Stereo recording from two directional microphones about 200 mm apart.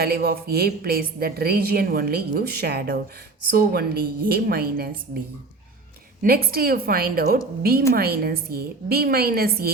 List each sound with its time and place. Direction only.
0.0 s a woman's voice: 50° right (ahead or behind)
6.2 s a woman's voice: 50° right (ahead or behind)